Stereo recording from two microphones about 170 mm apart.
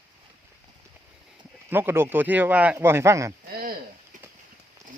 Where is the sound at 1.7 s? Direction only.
10° right (ahead or behind).